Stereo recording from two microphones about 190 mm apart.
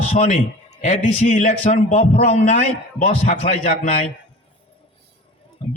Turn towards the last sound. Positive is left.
turn(degrees=35)  # may be behind; listen again after turning